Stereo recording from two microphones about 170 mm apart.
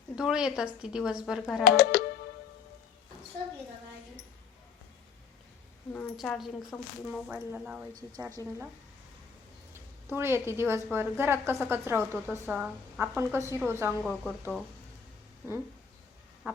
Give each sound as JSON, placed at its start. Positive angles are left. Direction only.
{"t": 0.2, "sound": "speech", "side_deg": -5}
{"t": 1.6, "sound": "speech", "side_deg": 60}
{"t": 5.9, "sound": "speech", "side_deg": 5}
{"t": 8.4, "sound": "a woman's voice", "side_deg": 20}
{"t": 9.7, "sound": "a woman's voice", "side_deg": -15}
{"t": 14.3, "sound": "speech", "side_deg": -5}